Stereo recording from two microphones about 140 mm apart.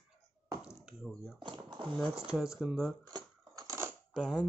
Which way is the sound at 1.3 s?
35° right (ahead or behind).